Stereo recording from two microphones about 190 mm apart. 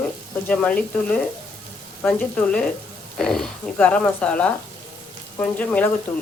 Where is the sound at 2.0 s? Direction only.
5° left (ahead or behind).